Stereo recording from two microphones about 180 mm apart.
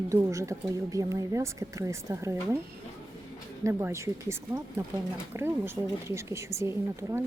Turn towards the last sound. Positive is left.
turn(degrees=-15)  # may be behind; listen again after turning